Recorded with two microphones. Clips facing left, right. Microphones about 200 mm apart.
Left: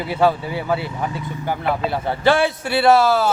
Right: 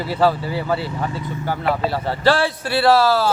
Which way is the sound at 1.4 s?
20° left (ahead or behind).